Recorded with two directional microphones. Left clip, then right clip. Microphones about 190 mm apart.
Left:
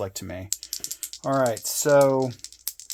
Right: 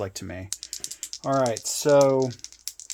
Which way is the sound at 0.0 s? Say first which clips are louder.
Left 1 dB; 20° right (ahead or behind).